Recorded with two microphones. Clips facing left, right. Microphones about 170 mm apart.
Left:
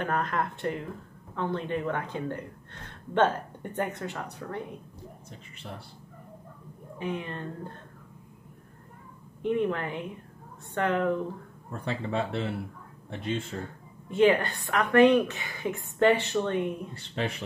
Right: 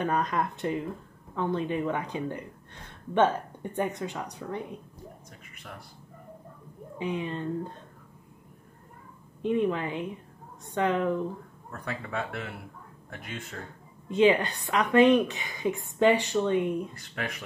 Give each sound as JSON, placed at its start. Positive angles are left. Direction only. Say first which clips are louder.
{"t": 0.0, "sound": "speech", "louder": "right 1 dB", "side_deg": -15}
{"t": 7.0, "sound": "speech", "louder": "right 2 dB", "side_deg": -15}
{"t": 9.4, "sound": "speech", "louder": "right 1 dB", "side_deg": -15}
{"t": 11.7, "sound": "speech", "louder": "left 4 dB", "side_deg": 25}
{"t": 14.1, "sound": "speech", "louder": "even", "side_deg": -15}
{"t": 16.9, "sound": "speech", "louder": "left 4 dB", "side_deg": 30}